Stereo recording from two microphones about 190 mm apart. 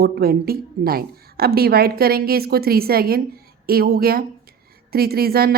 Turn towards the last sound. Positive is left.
turn(degrees=-55)  # may be behind; listen again after turning